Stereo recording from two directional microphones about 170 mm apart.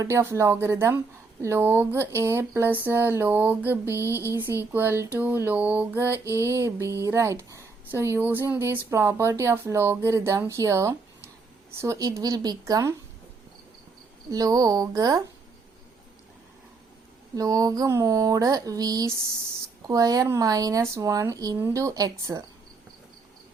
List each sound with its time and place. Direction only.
0.0 s speech: 15° right (ahead or behind)
3.9 s a sound: 15° left (ahead or behind)
4.3 s speech: 15° right (ahead or behind)
14.3 s speech: 20° right (ahead or behind)
17.3 s speech: 20° right (ahead or behind)